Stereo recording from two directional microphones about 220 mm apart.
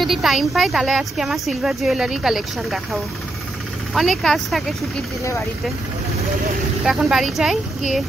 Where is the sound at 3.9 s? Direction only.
Centre (ahead or behind).